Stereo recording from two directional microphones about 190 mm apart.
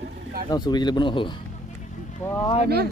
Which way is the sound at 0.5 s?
20° left (ahead or behind).